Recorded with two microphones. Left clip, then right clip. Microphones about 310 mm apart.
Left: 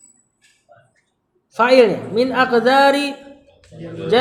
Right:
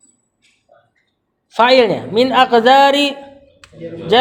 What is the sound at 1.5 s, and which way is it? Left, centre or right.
Speech, right.